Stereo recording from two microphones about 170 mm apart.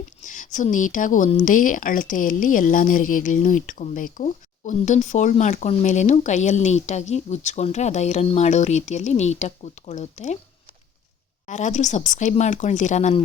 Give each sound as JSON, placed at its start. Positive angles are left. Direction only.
{"t": 0.2, "sound": "speech", "side_deg": 45}
{"t": 11.4, "sound": "speech", "side_deg": 45}